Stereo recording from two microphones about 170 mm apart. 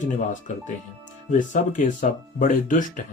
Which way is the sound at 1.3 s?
45° left (ahead or behind).